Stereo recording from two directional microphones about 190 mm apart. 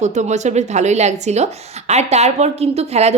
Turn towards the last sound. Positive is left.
turn(degrees=-35)  # may be behind; listen again after turning